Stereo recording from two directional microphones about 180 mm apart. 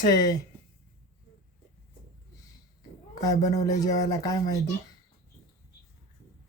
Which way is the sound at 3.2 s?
20° left (ahead or behind).